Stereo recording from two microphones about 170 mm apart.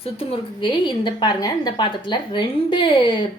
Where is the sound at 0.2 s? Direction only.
30° left (ahead or behind).